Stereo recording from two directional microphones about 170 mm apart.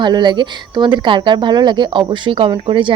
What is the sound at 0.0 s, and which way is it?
Speech, 25° right (ahead or behind).